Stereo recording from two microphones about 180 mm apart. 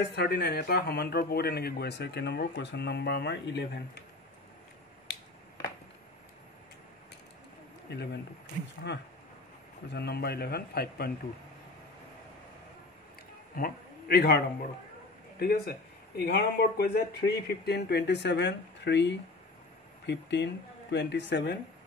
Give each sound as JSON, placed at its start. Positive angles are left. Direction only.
{"t": 0.1, "sound": "a man's voice", "side_deg": 65}
{"t": 7.9, "sound": "a man's voice", "side_deg": 70}
{"t": 13.6, "sound": "a man's voice", "side_deg": 55}